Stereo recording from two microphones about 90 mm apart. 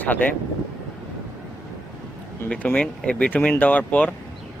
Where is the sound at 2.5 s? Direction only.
15° left (ahead or behind).